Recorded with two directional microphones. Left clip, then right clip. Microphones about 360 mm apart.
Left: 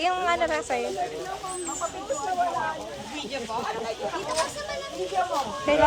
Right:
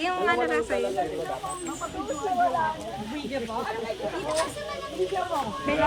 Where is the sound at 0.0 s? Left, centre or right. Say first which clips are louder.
Left 1 dB; centre.